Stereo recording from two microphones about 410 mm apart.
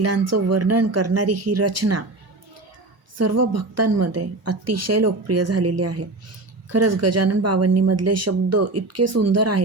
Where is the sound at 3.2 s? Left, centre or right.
Right.